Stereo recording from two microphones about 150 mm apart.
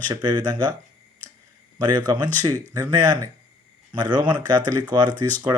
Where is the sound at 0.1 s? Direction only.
30° right (ahead or behind).